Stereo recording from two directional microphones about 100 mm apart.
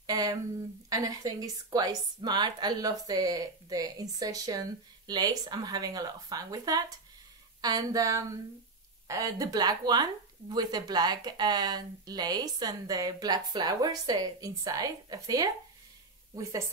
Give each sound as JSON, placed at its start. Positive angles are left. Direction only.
{"t": 0.0, "sound": "a woman's voice", "side_deg": -40}